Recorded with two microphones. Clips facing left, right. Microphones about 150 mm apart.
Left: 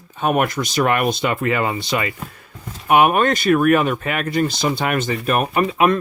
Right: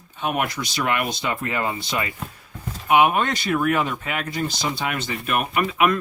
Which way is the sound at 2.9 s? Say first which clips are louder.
Left 3 dB; 55° left (ahead or behind).